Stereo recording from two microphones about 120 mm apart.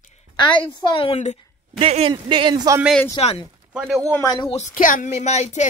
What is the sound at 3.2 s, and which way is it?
Speech, 55° left (ahead or behind).